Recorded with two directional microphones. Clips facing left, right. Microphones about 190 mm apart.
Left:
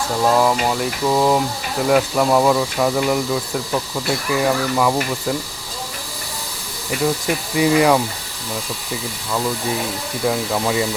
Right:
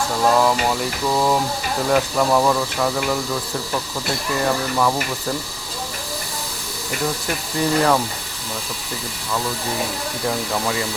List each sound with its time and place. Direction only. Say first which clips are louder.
0.2 s a sound: left 1 dB; 5° left (ahead or behind)
1.9 s speech: left 2 dB; 10° left (ahead or behind)
4.3 s speech: left 3 dB; 10° left (ahead or behind)
7.5 s speech: left 3 dB; 10° left (ahead or behind)
10.2 s speech: left 4 dB; 10° left (ahead or behind)